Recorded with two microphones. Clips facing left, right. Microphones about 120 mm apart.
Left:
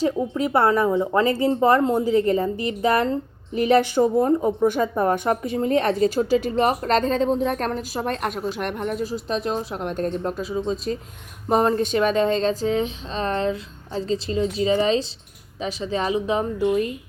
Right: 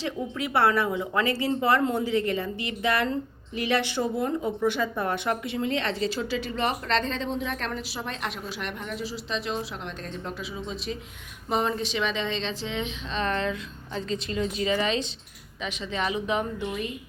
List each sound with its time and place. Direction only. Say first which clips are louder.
0.0 s speech: left 8 dB; 40° left (ahead or behind)